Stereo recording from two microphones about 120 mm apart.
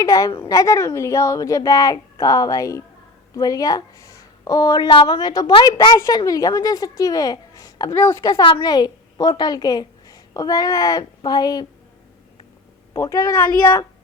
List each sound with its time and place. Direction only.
0.0 s a woman's voice: 30° left (ahead or behind)
12.9 s a woman's voice: 25° left (ahead or behind)